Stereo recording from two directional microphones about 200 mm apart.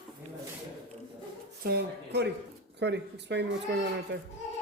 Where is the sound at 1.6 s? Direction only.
50° right (ahead or behind).